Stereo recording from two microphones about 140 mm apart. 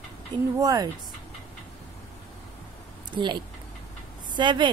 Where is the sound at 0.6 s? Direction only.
25° right (ahead or behind).